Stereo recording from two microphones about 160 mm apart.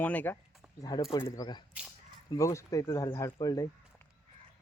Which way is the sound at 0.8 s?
25° left (ahead or behind).